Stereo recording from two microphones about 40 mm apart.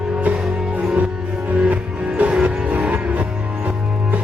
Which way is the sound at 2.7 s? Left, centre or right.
Right.